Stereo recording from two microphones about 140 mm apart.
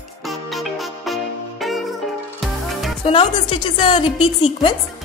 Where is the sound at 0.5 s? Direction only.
Centre (ahead or behind).